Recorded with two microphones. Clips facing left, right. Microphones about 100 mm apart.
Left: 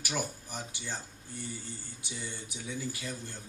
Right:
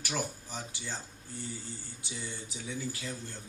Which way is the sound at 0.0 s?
15° left (ahead or behind).